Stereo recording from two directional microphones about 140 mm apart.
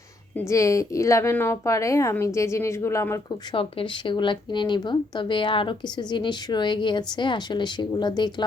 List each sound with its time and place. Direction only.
0.3 s a woman's voice: 20° left (ahead or behind)
3.5 s speech: 40° left (ahead or behind)